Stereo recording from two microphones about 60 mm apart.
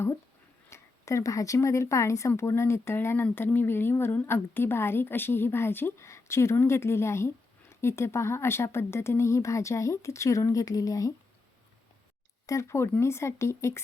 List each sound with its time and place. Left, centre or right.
0.7 s a woman's voice: left
12.5 s speech: left